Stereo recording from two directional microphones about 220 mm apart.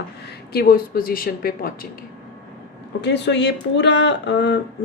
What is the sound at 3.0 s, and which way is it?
A woman's voice, 50° left (ahead or behind).